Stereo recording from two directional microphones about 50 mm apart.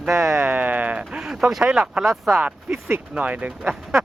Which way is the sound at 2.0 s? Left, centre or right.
Centre.